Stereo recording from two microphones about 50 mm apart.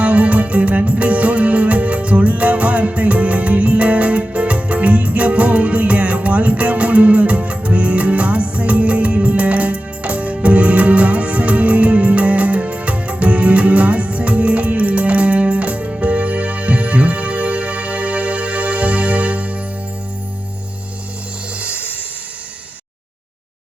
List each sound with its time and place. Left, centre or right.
0.0 s music: right
21.6 s music: right